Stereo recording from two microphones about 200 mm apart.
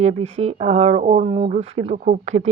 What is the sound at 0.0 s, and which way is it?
Speech, 35° right (ahead or behind).